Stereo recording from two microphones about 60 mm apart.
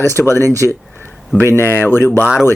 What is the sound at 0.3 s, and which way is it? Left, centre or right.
Speech, left.